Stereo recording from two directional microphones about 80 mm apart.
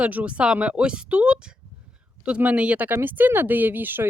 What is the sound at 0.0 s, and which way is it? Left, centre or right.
Speech, centre.